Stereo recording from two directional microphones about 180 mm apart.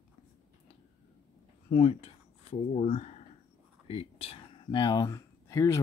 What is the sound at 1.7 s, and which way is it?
Speech, 35° left (ahead or behind).